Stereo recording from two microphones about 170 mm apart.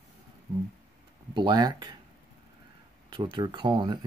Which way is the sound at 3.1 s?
25° right (ahead or behind).